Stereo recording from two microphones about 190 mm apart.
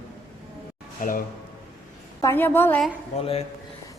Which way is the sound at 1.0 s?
45° left (ahead or behind).